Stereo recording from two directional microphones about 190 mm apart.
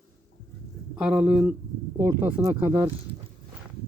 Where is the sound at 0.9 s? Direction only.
5° right (ahead or behind).